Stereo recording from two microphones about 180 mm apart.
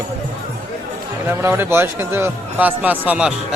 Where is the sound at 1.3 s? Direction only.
10° right (ahead or behind).